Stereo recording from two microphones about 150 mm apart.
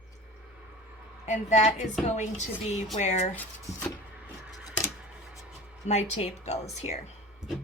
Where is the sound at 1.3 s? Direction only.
50° left (ahead or behind).